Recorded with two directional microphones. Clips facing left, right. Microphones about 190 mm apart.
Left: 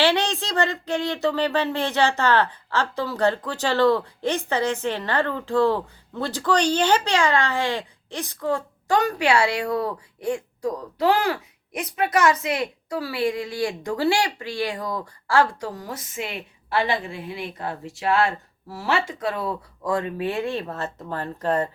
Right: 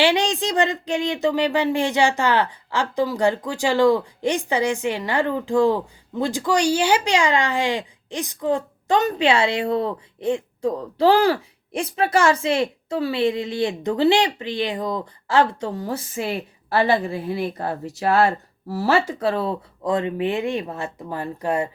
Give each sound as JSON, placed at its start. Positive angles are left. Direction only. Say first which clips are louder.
{"t": 0.0, "sound": "speech", "louder": "right 2 dB", "side_deg": -15}